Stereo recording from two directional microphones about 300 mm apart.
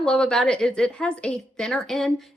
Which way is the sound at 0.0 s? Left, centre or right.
Centre.